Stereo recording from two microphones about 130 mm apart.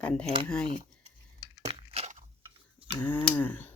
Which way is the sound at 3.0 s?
10° left (ahead or behind).